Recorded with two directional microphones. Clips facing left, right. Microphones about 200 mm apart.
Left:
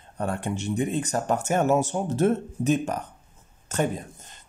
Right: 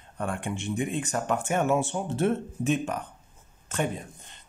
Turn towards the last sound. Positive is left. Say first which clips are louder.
# left 3 dB
turn(degrees=40)  # may be behind; listen again after turning